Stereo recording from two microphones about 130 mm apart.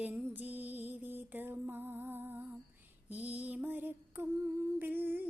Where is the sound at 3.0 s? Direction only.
10° right (ahead or behind).